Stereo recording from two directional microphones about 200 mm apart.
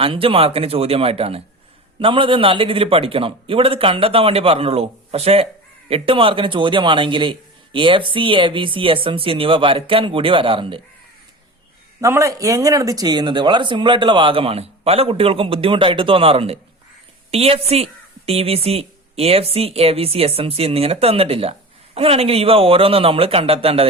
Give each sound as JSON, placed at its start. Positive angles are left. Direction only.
{"t": 0.0, "sound": "a woman's voice", "side_deg": -25}
{"t": 11.9, "sound": "a woman's voice", "side_deg": -15}